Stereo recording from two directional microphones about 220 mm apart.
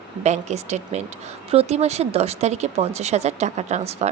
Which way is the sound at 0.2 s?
30° right (ahead or behind).